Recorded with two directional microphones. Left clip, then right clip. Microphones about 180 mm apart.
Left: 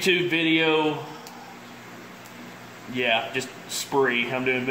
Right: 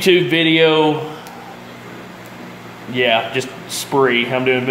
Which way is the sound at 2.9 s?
15° right (ahead or behind).